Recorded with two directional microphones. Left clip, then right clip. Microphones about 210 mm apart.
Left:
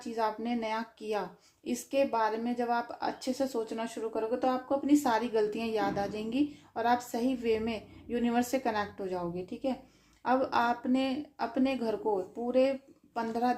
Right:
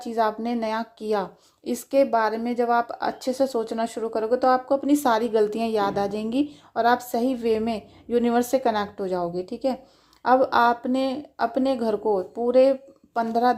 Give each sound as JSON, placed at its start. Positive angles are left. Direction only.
{"t": 0.0, "sound": "speech", "side_deg": -40}